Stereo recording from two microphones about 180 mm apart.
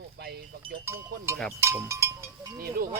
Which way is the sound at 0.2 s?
60° right (ahead or behind).